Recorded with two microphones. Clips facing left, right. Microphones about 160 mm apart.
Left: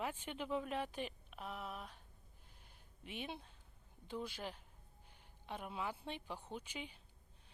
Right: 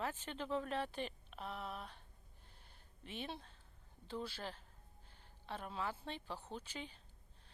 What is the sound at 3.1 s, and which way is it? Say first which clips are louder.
Speech: even; 10° left (ahead or behind).